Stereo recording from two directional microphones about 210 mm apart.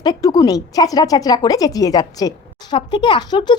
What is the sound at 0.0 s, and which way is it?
A woman's voice, 20° left (ahead or behind).